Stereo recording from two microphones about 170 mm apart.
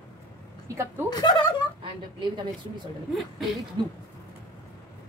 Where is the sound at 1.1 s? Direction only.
25° left (ahead or behind).